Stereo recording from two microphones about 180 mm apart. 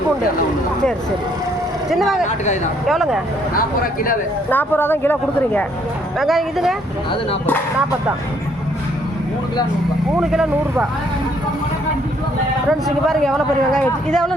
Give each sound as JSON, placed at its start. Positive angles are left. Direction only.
{"t": 1.9, "sound": "speech", "side_deg": 0}
{"t": 3.5, "sound": "speech", "side_deg": 50}
{"t": 4.4, "sound": "speech", "side_deg": 10}
{"t": 6.1, "sound": "speech", "side_deg": 0}
{"t": 10.1, "sound": "speech", "side_deg": -5}
{"t": 13.7, "sound": "speech", "side_deg": 5}